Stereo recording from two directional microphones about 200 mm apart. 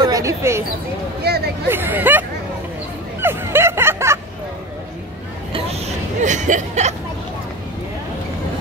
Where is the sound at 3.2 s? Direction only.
10° right (ahead or behind).